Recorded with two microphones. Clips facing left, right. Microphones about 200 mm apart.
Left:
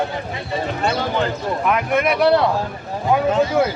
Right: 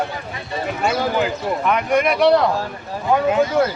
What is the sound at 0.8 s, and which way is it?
Speech, 10° right (ahead or behind).